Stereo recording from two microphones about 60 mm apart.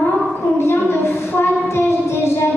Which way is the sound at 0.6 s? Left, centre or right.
Left.